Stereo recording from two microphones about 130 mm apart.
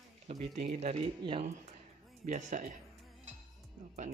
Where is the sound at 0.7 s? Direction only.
55° right (ahead or behind).